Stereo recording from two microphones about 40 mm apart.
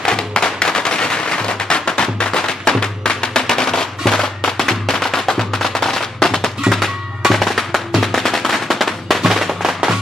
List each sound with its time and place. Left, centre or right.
0.0 s music: centre
8.0 s firecracker: centre